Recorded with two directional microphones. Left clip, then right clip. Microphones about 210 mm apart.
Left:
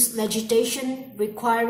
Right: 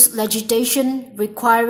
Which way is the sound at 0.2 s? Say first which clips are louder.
Right 1 dB; 50° right (ahead or behind).